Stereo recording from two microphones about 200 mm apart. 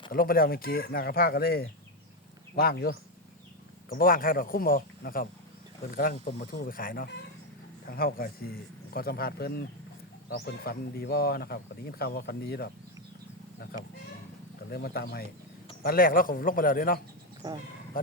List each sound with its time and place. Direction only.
0.1 s speech: 45° left (ahead or behind)
14.7 s speech: 50° left (ahead or behind)
17.4 s speech: 20° right (ahead or behind)
18.0 s speech: 45° left (ahead or behind)